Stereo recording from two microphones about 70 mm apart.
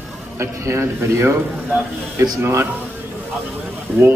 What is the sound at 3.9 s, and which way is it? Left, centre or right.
Speech, right.